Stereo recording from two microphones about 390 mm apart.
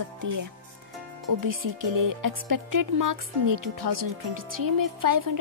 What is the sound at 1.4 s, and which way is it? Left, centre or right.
A woman's voice, right.